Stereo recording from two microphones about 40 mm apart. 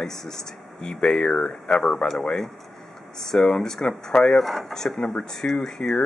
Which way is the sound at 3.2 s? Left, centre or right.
Centre.